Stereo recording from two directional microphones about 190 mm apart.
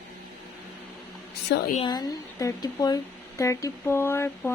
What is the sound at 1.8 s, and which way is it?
Speech, 20° left (ahead or behind).